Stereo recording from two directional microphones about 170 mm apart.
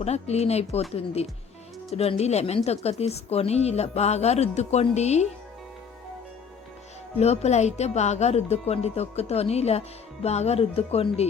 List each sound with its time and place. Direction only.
0.0 s a woman's voice: 40° left (ahead or behind)
7.2 s a woman's voice: 40° left (ahead or behind)